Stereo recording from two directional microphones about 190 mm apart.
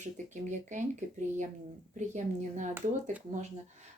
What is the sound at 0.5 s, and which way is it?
Speech, 40° right (ahead or behind).